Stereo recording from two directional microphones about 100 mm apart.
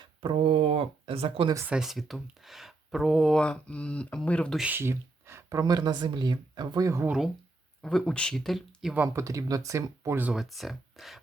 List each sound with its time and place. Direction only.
0.0 s speech: 60° right (ahead or behind)
1.6 s speech: 5° right (ahead or behind)
3.4 s speech: 10° left (ahead or behind)
4.7 s speech: 25° right (ahead or behind); by 6.8 s 50° right (ahead or behind)
6.8 s speech: 30° right (ahead or behind)
7.8 s speech: 5° left (ahead or behind)
9.1 s speech: 35° right (ahead or behind)
10.3 s speech: centre (ahead or behind)